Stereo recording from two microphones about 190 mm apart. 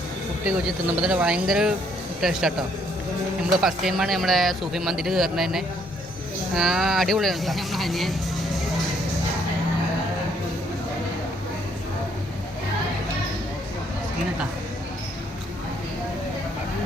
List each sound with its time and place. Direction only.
0.4 s speech: 5° right (ahead or behind)